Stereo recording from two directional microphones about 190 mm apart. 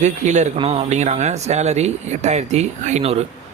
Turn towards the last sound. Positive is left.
turn(degrees=-35)  # may be behind; listen again after turning